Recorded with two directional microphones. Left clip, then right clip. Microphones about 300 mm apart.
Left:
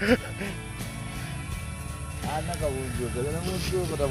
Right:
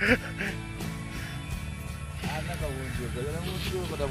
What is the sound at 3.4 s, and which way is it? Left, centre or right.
Speech, left.